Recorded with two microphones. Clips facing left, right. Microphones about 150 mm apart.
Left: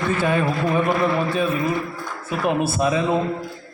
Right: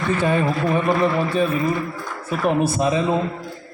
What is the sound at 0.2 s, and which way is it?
Speech, 5° left (ahead or behind).